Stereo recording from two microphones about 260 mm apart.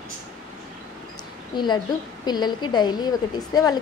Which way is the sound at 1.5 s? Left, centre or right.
Centre.